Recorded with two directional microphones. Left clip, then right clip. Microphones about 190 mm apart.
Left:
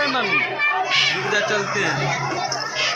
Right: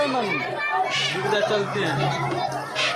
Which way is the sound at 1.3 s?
Centre (ahead or behind).